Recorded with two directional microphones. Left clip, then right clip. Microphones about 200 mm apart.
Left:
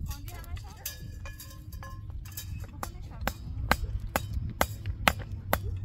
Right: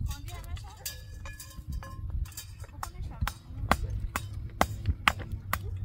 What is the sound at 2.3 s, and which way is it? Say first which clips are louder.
Music: left 4 dB; 20° left (ahead or behind).